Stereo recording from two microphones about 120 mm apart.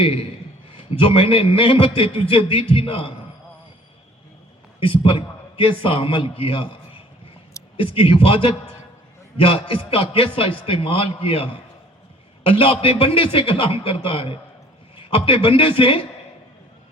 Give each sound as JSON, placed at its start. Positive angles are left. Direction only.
{"t": 0.0, "sound": "a man's voice", "side_deg": 50}
{"t": 4.8, "sound": "a man's voice", "side_deg": 45}